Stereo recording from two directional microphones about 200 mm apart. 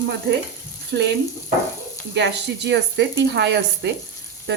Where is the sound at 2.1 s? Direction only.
60° right (ahead or behind).